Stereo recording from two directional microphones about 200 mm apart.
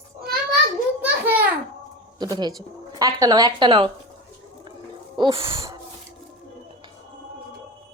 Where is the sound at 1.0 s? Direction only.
10° right (ahead or behind).